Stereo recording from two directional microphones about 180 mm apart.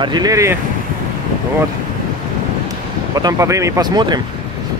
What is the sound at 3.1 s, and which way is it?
Speech, 20° right (ahead or behind).